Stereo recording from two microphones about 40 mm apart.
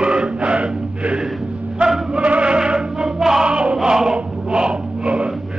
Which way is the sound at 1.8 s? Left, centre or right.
Right.